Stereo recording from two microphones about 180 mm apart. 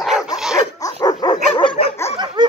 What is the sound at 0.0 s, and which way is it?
Dog, centre (ahead or behind).